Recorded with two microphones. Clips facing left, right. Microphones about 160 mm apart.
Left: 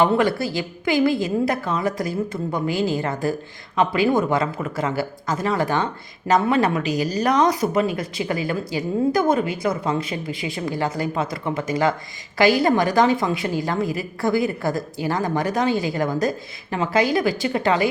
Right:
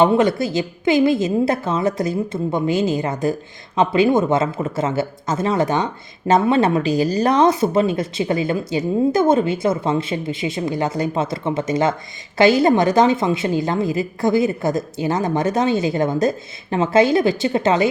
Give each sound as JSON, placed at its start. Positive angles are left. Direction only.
{"t": 0.0, "sound": "speech", "side_deg": -20}